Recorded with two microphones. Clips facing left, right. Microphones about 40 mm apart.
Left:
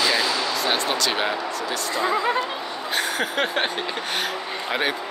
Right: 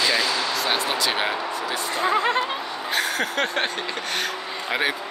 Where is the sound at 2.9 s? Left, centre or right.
Centre.